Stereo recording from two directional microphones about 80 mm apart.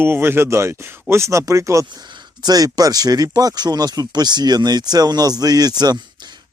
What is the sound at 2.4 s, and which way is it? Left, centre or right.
Speech, right.